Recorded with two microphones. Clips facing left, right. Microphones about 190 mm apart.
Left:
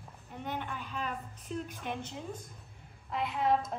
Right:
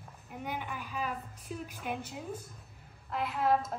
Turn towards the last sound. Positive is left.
turn(degrees=0)  # may be behind; listen again after turning